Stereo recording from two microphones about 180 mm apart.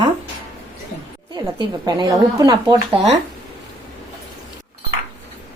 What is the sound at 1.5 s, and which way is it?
Speech, 25° right (ahead or behind).